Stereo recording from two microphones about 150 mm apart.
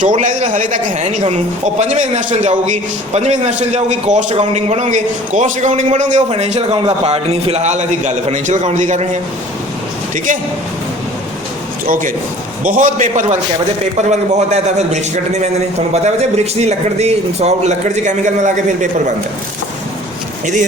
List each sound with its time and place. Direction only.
0.0 s a man's voice: 60° right (ahead or behind)
11.9 s a man's voice: 60° right (ahead or behind)
16.6 s a man's voice: 45° right (ahead or behind)